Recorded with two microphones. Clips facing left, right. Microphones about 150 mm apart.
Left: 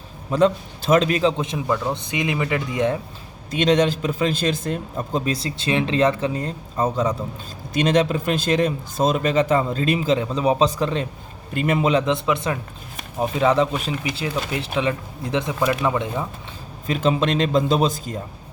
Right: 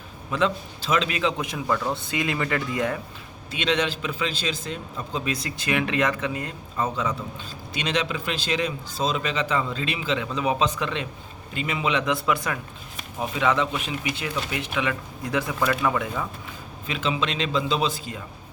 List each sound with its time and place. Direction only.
0.3 s a man's voice: 40° left (ahead or behind); by 1.6 s 25° left (ahead or behind)
1.6 s speech: 15° left (ahead or behind)
3.5 s a man's voice: 40° left (ahead or behind)
11.5 s speech: 50° left (ahead or behind)
12.0 s speech: 20° left (ahead or behind)
13.1 s a man's voice: 35° left (ahead or behind)
16.8 s speech: 40° left (ahead or behind)